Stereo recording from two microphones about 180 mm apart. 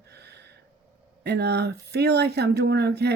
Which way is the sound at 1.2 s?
65° right (ahead or behind).